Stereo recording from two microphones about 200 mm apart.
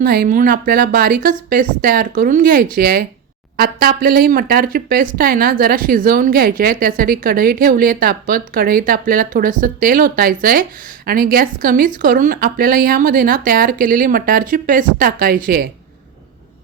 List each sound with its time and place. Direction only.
0.0 s speech: 55° right (ahead or behind)